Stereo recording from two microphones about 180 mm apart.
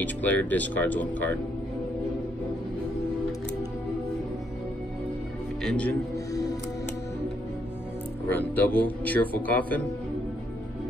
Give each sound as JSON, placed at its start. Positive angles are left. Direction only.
{"t": 0.0, "sound": "a man's voice", "side_deg": 10}
{"t": 5.6, "sound": "a man's voice", "side_deg": 5}
{"t": 8.3, "sound": "a man's voice", "side_deg": 10}